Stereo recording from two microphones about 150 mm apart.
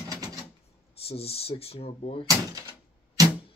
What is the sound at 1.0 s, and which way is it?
Speech, 40° left (ahead or behind).